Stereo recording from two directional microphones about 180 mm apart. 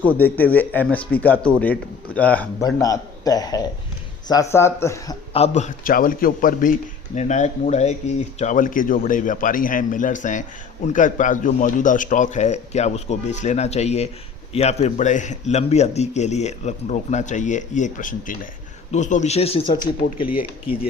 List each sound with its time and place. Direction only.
0.0 s speech: 10° left (ahead or behind)
2.6 s a man's voice: 20° left (ahead or behind)
5.3 s a man's voice: 35° left (ahead or behind)
20.3 s speech: 10° right (ahead or behind)